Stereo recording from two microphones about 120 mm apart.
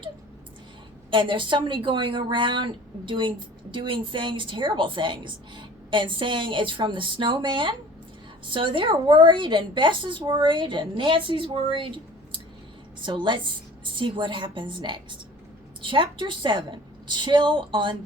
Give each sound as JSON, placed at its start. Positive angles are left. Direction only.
{"t": 1.1, "sound": "a woman's voice", "side_deg": -45}